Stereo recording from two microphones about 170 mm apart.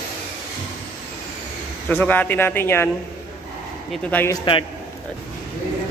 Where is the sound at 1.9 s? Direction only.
10° left (ahead or behind).